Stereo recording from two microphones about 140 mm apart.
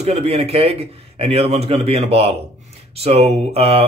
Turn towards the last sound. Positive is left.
turn(degrees=-45)  # may be behind; listen again after turning